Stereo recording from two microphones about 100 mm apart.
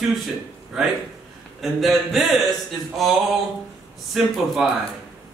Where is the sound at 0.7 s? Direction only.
5° right (ahead or behind).